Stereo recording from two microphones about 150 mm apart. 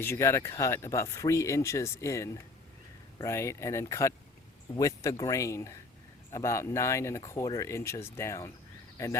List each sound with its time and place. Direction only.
0.0 s speech: 15° left (ahead or behind)